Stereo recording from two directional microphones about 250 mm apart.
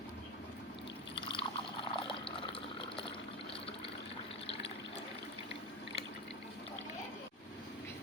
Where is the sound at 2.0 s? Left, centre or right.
Left.